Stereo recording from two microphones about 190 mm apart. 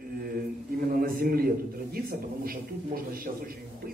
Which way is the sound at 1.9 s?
50° right (ahead or behind).